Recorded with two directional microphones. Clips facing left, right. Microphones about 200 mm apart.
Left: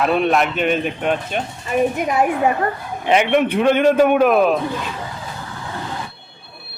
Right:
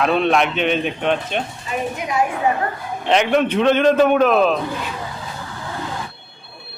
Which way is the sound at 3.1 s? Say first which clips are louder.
Left 1 dB; 10° left (ahead or behind).